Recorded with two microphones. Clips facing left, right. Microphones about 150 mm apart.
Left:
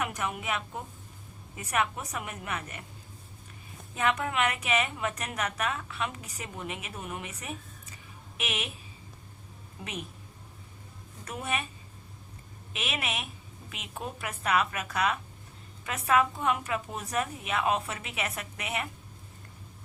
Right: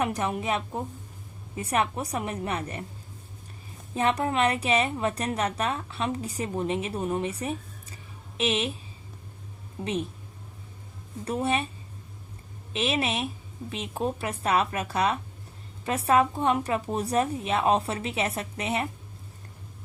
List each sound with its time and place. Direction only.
0.0 s a woman's voice: 30° right (ahead or behind)
3.9 s a woman's voice: 35° right (ahead or behind)
9.8 s a woman's voice: 30° right (ahead or behind)
11.3 s a woman's voice: 30° right (ahead or behind)
12.7 s a woman's voice: 30° right (ahead or behind)